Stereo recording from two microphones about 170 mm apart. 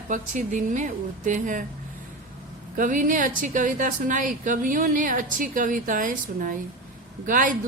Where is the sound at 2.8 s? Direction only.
50° right (ahead or behind).